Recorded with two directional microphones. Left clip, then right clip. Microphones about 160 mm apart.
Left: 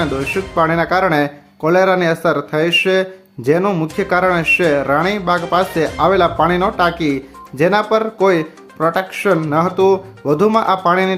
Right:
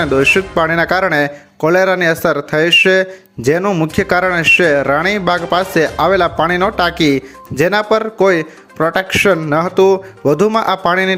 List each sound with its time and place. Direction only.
0.0 s speech: 25° right (ahead or behind)
3.6 s speech: 10° right (ahead or behind)
3.9 s speech: 25° right (ahead or behind)